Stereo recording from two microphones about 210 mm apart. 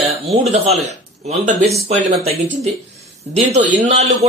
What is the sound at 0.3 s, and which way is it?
Speech, 30° right (ahead or behind).